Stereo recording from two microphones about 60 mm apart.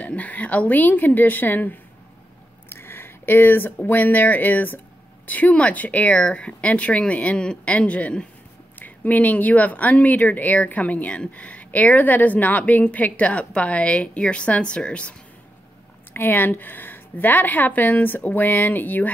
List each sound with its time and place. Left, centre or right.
0.0 s speech: left
16.1 s a woman's voice: left